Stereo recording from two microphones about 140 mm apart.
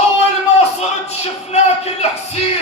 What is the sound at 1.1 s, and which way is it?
Music, 50° left (ahead or behind).